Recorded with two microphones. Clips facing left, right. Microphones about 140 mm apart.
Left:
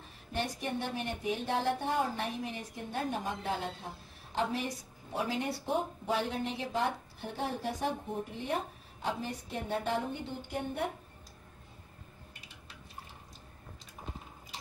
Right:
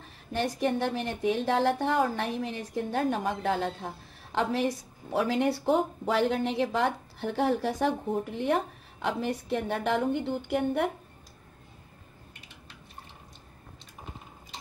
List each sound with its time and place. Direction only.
0.3 s a woman's voice: 90° right; by 10.9 s 70° right (ahead or behind)